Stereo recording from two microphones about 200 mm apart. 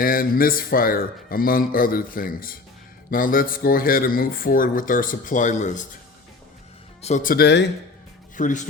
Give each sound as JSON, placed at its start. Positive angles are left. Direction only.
{"t": 0.0, "sound": "speech", "side_deg": 45}
{"t": 7.0, "sound": "speech", "side_deg": 40}
{"t": 8.4, "sound": "a man's voice", "side_deg": 40}